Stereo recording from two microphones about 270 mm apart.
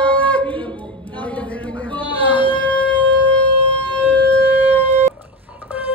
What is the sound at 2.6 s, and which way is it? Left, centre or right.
Shofar, centre.